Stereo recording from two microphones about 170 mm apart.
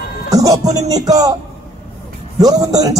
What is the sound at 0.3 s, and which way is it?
Speech, 20° right (ahead or behind).